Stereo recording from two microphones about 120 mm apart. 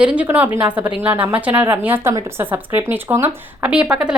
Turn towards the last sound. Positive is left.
turn(degrees=-5)  # may be behind; listen again after turning